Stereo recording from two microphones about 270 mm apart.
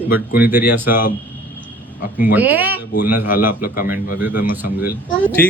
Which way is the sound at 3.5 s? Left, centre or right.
Left.